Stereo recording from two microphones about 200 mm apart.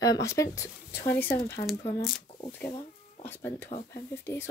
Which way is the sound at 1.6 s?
35° left (ahead or behind).